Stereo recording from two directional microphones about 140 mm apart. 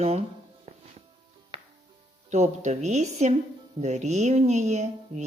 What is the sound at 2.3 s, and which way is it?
Speech, 55° right (ahead or behind).